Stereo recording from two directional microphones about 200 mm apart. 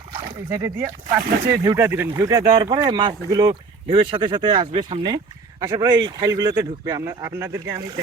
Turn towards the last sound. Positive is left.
turn(degrees=-20)  # may be behind; listen again after turning